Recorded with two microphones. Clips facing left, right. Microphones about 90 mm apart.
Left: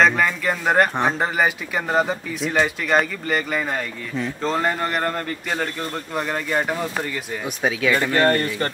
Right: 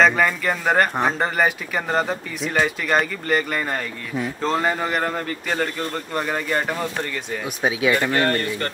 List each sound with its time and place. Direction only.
0.0 s speech: centre (ahead or behind)
7.7 s speech: 15° right (ahead or behind)
8.2 s speech: 30° left (ahead or behind)